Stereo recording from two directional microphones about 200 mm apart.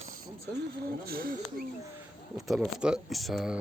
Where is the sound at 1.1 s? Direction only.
45° right (ahead or behind).